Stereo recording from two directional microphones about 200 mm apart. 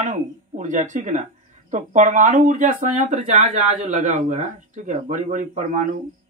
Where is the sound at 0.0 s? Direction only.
40° right (ahead or behind).